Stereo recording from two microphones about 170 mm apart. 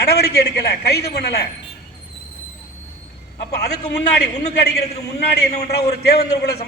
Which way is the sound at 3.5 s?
75° left (ahead or behind).